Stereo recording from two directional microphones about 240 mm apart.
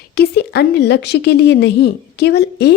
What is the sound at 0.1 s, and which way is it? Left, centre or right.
A woman's voice, left.